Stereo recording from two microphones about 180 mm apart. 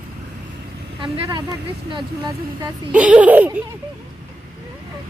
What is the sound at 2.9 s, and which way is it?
Speech, 5° right (ahead or behind).